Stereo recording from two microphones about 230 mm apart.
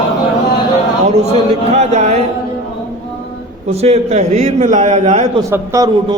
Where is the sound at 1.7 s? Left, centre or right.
Right.